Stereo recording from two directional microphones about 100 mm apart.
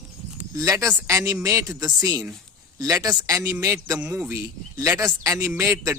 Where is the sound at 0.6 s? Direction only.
30° right (ahead or behind).